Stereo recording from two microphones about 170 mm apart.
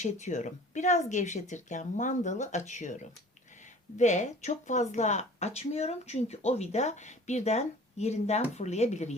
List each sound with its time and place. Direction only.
0.0 s speech: 45° left (ahead or behind)